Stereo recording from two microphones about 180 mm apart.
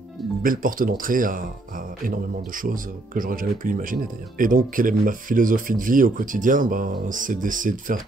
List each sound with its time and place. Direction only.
0.4 s speech: 50° right (ahead or behind)